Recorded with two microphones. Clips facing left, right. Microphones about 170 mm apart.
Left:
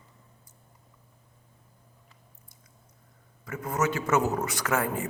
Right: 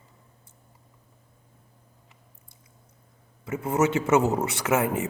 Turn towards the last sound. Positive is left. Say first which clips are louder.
# right 4 dB
turn(degrees=-20)  # may be behind; listen again after turning